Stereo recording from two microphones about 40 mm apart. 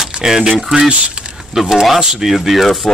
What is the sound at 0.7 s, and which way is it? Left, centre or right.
Speech, right.